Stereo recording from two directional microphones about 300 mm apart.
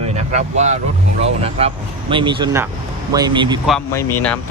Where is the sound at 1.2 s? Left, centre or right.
Centre.